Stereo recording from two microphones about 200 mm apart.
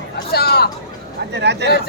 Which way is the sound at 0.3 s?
50° left (ahead or behind).